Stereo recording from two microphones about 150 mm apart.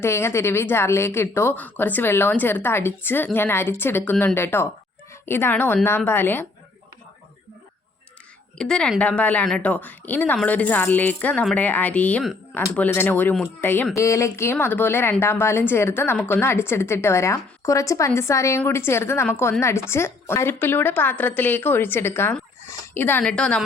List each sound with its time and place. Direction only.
0.0 s speech: 15° left (ahead or behind)
8.5 s speech: 5° left (ahead or behind)